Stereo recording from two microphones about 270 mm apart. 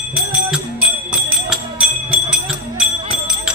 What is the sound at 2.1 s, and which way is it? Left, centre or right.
Music, centre.